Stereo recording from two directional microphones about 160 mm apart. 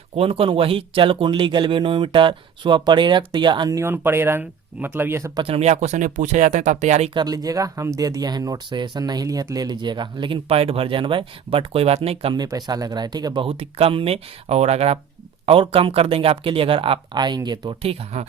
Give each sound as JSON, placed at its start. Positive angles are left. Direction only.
{"t": 0.2, "sound": "speech", "side_deg": -35}
{"t": 5.4, "sound": "speech", "side_deg": -40}
{"t": 7.1, "sound": "speech", "side_deg": -25}
{"t": 12.4, "sound": "speech", "side_deg": -25}